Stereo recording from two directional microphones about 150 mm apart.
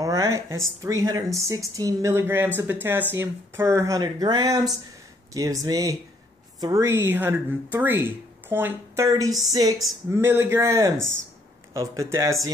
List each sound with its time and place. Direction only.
0.0 s speech: 25° right (ahead or behind)